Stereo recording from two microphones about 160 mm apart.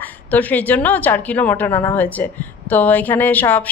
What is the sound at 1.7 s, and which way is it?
Speech, 25° left (ahead or behind).